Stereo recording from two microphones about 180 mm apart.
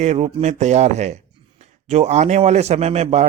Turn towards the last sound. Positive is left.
turn(degrees=-35)  # may be behind; listen again after turning